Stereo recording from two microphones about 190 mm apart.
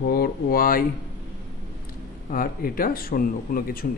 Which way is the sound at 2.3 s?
50° left (ahead or behind).